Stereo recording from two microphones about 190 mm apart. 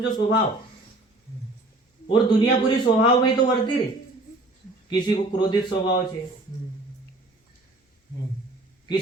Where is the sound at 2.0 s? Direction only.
25° left (ahead or behind).